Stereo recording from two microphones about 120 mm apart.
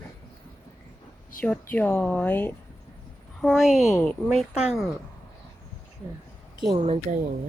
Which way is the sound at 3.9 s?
15° left (ahead or behind).